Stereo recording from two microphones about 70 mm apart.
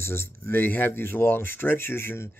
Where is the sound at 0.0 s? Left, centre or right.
Left.